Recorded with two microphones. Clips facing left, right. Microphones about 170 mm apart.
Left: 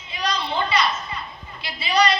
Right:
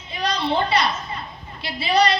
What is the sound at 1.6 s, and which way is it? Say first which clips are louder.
Speech: right 2 dB; 60° right (ahead or behind).